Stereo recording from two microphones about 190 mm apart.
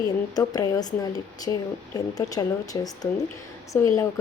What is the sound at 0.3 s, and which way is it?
Speech, 20° left (ahead or behind).